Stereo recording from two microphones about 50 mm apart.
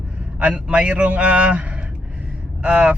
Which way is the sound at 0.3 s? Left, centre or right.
Right.